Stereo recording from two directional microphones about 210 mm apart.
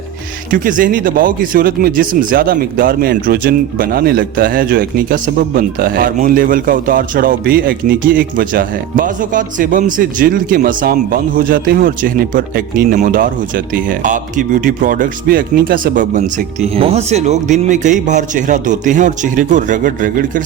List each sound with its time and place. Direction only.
0.5 s speech: 40° right (ahead or behind)